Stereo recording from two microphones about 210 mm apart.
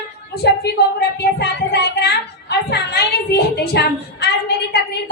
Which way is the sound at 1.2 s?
55° left (ahead or behind).